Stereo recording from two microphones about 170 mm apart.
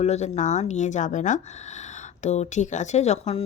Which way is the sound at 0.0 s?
40° left (ahead or behind).